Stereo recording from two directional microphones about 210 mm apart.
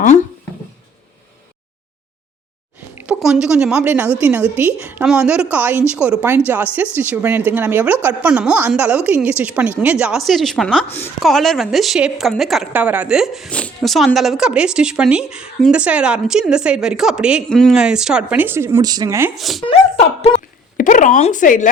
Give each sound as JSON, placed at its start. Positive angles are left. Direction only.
{"t": 2.9, "sound": "a woman's voice", "side_deg": -5}
{"t": 19.4, "sound": "a woman's voice", "side_deg": 0}
{"t": 19.6, "sound": "speech", "side_deg": 30}